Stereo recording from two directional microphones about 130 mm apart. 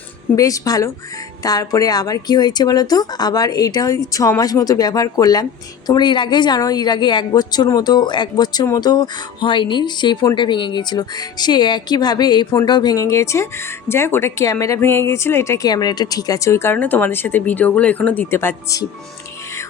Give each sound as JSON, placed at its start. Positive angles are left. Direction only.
{"t": 0.3, "sound": "a woman's voice", "side_deg": 25}